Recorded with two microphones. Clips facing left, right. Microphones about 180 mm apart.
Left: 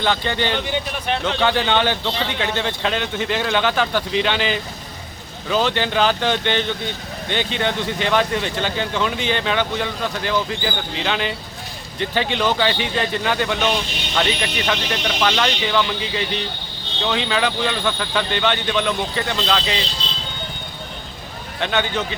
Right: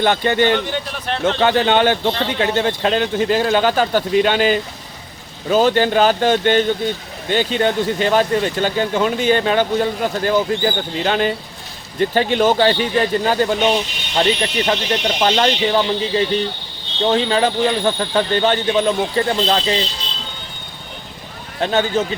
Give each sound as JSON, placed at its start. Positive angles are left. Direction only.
{"t": 0.0, "sound": "speech", "side_deg": -50}
{"t": 0.7, "sound": "speech", "side_deg": 5}
{"t": 1.4, "sound": "speech", "side_deg": -45}
{"t": 21.6, "sound": "speech", "side_deg": -40}